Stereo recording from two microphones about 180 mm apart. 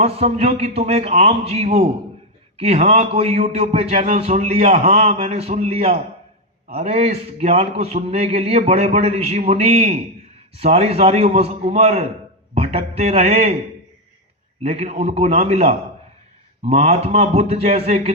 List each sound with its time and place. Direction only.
0.0 s a man's voice: 35° right (ahead or behind)
14.6 s a man's voice: 35° right (ahead or behind)